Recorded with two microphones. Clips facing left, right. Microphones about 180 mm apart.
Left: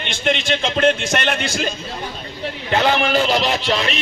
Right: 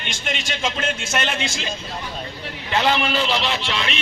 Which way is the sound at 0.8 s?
60° left (ahead or behind).